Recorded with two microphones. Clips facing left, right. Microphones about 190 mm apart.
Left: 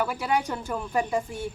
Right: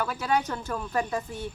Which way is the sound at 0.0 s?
10° left (ahead or behind).